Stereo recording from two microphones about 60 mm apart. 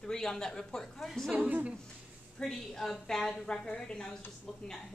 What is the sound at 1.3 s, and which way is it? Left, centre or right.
Speech, right.